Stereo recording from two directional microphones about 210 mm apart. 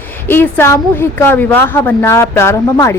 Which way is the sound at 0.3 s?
10° left (ahead or behind).